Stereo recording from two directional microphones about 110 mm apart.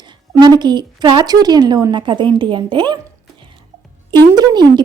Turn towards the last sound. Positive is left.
turn(degrees=-40)  # may be behind; listen again after turning